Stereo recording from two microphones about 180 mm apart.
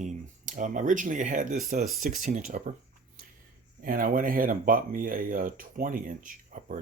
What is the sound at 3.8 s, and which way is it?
Speech, 50° right (ahead or behind).